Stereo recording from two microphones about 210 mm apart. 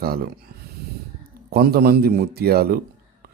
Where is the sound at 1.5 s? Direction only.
45° right (ahead or behind).